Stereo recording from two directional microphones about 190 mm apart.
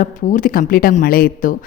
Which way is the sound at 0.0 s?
45° left (ahead or behind).